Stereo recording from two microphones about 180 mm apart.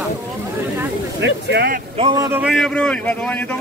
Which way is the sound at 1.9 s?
25° right (ahead or behind).